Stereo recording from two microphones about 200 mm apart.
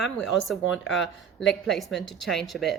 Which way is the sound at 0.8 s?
65° left (ahead or behind).